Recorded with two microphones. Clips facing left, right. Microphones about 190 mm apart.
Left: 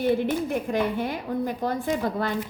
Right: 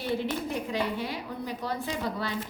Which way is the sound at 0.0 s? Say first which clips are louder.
Left 7 dB; 55° left (ahead or behind).